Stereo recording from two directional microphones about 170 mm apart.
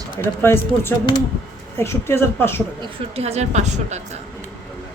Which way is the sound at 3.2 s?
40° right (ahead or behind).